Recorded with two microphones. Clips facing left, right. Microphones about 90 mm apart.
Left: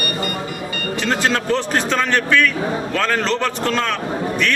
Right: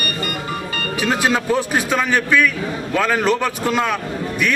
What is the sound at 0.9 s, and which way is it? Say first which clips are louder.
Speech: right 1 dB; 10° right (ahead or behind).